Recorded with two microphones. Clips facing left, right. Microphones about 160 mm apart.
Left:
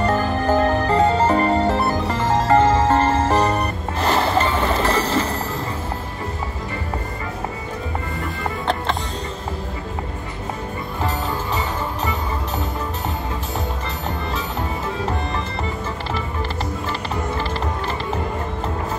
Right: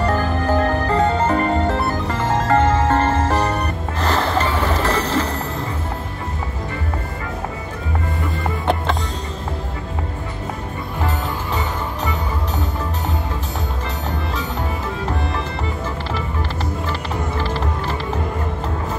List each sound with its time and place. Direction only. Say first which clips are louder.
0.0 s music: even; 5° left (ahead or behind)
2.4 s music: left 1 dB; 15° left (ahead or behind)